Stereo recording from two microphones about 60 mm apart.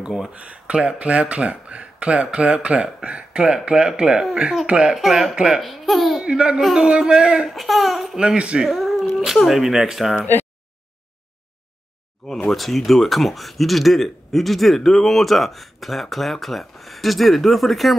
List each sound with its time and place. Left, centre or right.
0.3 s speech: centre
4.9 s a man's voice: centre
5.3 s speech: centre
5.6 s a man's voice: centre
6.2 s a man's voice: centre
8.2 s speech: centre
8.6 s cat: centre
9.4 s a man's voice: centre
12.4 s a man's voice: centre